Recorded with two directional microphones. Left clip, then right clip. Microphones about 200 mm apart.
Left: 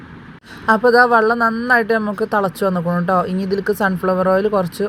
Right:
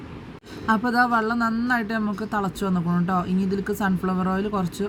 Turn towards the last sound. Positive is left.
turn(degrees=20)  # may be behind; listen again after turning